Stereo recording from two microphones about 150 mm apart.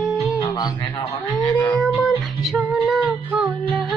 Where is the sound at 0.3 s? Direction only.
25° left (ahead or behind).